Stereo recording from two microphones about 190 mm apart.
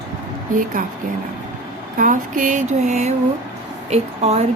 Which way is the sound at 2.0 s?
45° right (ahead or behind).